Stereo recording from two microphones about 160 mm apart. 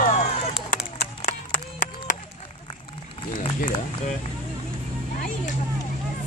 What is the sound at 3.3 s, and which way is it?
Run, 55° left (ahead or behind).